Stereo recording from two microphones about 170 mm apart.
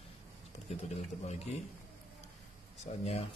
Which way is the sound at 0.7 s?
40° left (ahead or behind).